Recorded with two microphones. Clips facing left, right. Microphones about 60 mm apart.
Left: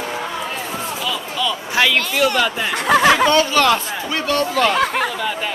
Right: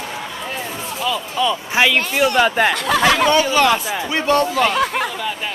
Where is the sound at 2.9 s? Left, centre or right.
Left.